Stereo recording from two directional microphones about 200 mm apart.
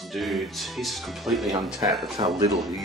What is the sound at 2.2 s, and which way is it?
Speech, 25° right (ahead or behind).